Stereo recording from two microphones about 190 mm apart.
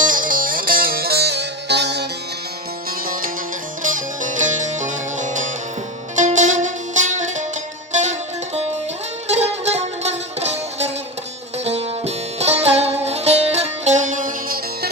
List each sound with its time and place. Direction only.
0.0 s music: 45° right (ahead or behind); by 2.0 s 65° right (ahead or behind)
3.8 s music: 45° right (ahead or behind)
9.3 s music: 35° right (ahead or behind)